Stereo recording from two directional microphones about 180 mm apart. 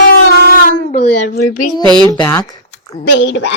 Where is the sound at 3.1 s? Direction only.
80° left.